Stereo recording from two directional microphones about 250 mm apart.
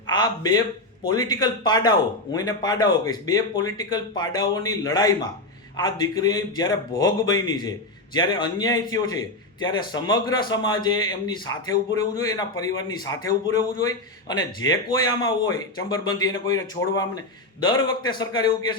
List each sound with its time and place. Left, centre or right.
0.1 s a man's voice: centre